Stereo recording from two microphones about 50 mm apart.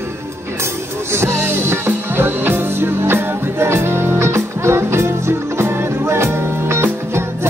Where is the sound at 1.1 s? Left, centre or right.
Right.